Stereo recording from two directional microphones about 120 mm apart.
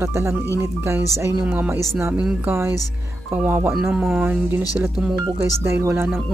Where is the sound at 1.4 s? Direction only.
15° right (ahead or behind).